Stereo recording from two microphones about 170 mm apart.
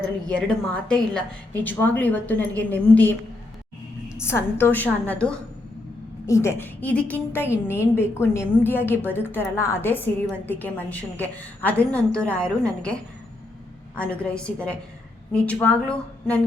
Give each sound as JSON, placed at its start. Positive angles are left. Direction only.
{"t": 0.3, "sound": "a woman's voice", "side_deg": 5}